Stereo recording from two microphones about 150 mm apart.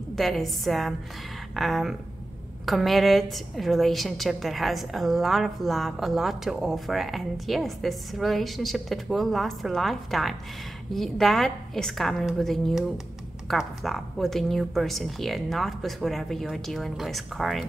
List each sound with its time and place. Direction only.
0.1 s a woman's voice: centre (ahead or behind)